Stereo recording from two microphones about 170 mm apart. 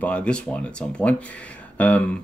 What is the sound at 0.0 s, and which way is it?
Speech, 5° left (ahead or behind).